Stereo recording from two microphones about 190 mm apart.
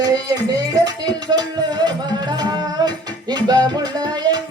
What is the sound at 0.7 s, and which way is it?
Music, 20° right (ahead or behind).